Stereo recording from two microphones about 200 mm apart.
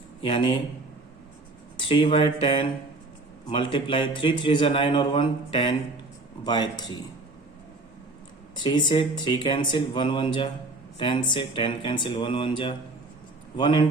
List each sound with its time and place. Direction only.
0.2 s a man's voice: 25° left (ahead or behind)
1.7 s a man's voice: 25° left (ahead or behind)
8.5 s a man's voice: 25° left (ahead or behind)